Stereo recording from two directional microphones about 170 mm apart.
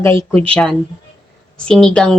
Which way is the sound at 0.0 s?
15° left (ahead or behind).